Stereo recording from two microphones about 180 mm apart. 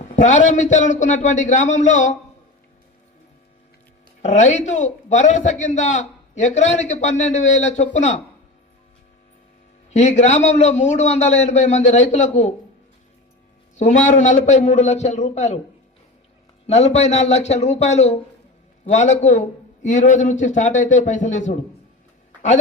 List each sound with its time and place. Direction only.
0.0 s a man's voice: 40° left (ahead or behind)
4.2 s a man's voice: 40° left (ahead or behind)
9.9 s a man's voice: 40° left (ahead or behind)
13.7 s a man's voice: 40° left (ahead or behind)
16.6 s a man's voice: 35° left (ahead or behind)